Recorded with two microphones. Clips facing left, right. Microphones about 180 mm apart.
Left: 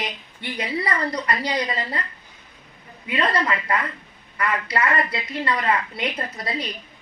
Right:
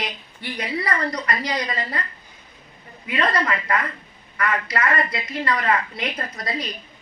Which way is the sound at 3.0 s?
25° left (ahead or behind).